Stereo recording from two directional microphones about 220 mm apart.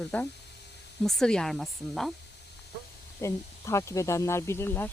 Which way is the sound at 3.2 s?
15° left (ahead or behind).